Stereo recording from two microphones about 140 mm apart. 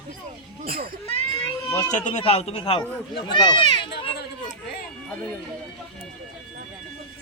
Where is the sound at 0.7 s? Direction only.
90° right.